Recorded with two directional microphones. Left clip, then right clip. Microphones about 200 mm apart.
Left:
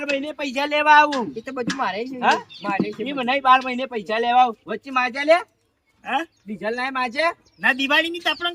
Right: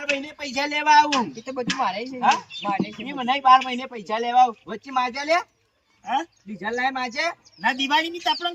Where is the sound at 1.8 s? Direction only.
25° left (ahead or behind).